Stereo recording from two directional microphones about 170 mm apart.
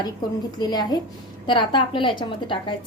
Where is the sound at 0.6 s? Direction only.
25° left (ahead or behind).